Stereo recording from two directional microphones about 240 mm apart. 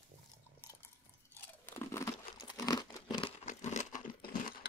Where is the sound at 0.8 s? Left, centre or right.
Centre.